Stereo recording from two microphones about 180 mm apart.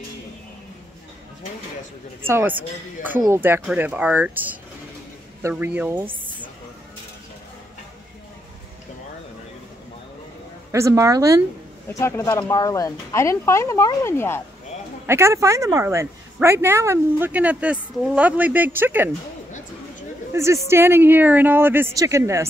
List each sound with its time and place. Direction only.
2.2 s speech: 10° right (ahead or behind)
10.7 s speech: 15° right (ahead or behind)
11.9 s speech: 15° left (ahead or behind)
15.0 s speech: 15° right (ahead or behind)
20.6 s speech: 15° right (ahead or behind)